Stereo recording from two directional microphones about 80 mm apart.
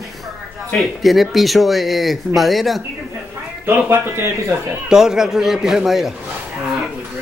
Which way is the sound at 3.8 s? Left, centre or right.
Right.